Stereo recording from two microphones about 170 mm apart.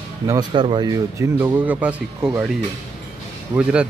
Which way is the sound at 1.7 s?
10° right (ahead or behind).